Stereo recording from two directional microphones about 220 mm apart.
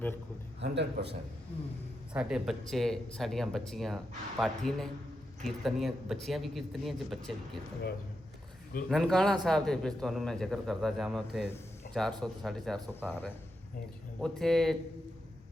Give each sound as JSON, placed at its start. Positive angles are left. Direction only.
{"t": 0.6, "sound": "a man's voice", "side_deg": -50}
{"t": 2.1, "sound": "a man's voice", "side_deg": 0}
{"t": 8.9, "sound": "a man's voice", "side_deg": 0}